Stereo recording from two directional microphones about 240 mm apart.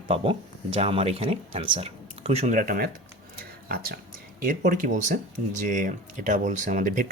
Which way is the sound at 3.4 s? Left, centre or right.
Right.